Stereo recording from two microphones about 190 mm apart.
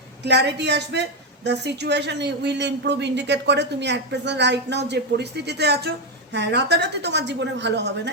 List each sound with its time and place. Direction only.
0.2 s a woman's voice: 65° right (ahead or behind)